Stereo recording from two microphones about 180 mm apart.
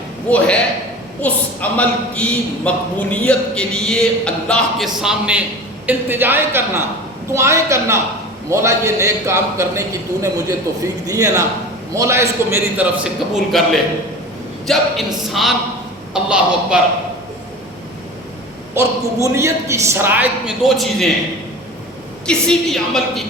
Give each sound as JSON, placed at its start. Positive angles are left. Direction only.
{"t": 0.3, "sound": "a man's voice", "side_deg": 5}
{"t": 13.3, "sound": "a woman's voice", "side_deg": 0}
{"t": 18.7, "sound": "a man's voice", "side_deg": -15}
{"t": 22.3, "sound": "a woman's voice", "side_deg": 5}